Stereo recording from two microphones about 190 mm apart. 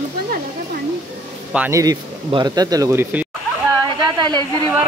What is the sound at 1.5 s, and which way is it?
Speech, 10° right (ahead or behind).